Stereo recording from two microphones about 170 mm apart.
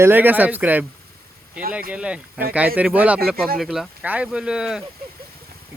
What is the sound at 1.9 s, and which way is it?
Speech, 5° right (ahead or behind).